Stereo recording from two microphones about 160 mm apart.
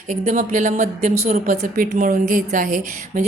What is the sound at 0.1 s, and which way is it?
A woman's voice, 50° right (ahead or behind).